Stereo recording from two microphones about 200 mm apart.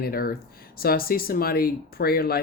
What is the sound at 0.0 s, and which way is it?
Speech, 50° left (ahead or behind).